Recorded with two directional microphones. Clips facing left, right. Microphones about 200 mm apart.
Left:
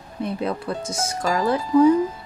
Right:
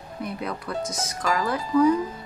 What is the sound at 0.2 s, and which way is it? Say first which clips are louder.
Speech: left 6 dB; 25° left (ahead or behind).